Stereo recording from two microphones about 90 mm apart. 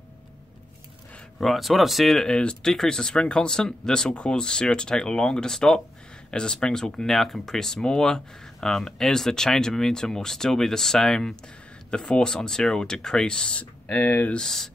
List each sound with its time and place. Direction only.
1.4 s speech: centre (ahead or behind); by 14.4 s 20° left (ahead or behind)
14.4 s speech: 5° left (ahead or behind)